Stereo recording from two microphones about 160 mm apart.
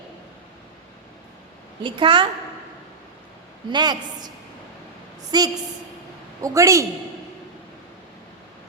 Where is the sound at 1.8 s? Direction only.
30° right (ahead or behind).